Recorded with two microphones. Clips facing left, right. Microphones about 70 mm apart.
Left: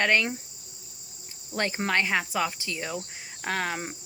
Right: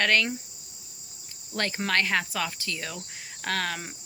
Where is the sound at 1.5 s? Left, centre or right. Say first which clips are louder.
Left 1 dB; centre.